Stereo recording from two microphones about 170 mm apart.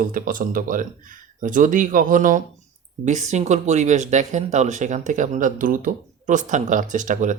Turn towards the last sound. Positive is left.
turn(degrees=-50)  # may be behind; listen again after turning